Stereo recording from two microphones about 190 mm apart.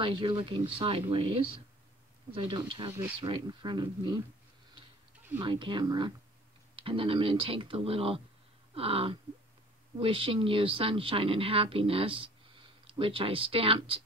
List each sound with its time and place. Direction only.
0.0 s speech: 25° right (ahead or behind)
5.4 s speech: 25° right (ahead or behind)